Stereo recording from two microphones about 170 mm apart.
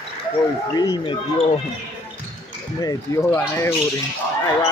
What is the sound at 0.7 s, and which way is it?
Speech, 25° left (ahead or behind).